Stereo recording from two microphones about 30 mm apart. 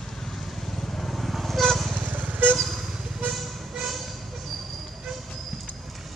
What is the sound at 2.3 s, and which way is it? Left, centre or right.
Vehicle, right.